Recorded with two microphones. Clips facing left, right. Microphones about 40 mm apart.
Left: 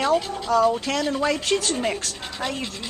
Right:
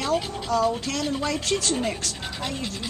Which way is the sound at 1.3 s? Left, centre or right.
Left.